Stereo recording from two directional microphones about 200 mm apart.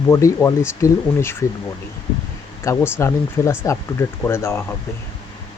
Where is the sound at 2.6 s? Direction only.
15° left (ahead or behind).